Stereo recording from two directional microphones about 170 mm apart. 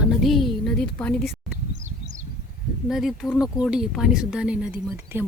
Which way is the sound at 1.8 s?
45° right (ahead or behind).